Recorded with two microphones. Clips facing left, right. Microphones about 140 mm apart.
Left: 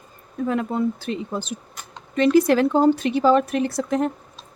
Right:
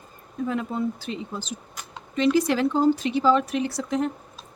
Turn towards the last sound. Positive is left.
turn(degrees=50)  # may be behind; listen again after turning